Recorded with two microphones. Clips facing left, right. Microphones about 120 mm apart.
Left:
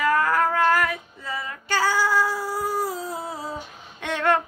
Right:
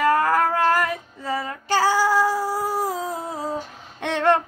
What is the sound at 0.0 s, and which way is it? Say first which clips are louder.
Female singing: right 2 dB; 40° right (ahead or behind).